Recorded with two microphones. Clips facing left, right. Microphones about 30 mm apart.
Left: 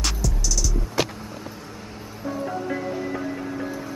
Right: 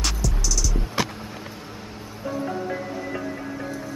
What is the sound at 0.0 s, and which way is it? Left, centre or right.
Music, centre.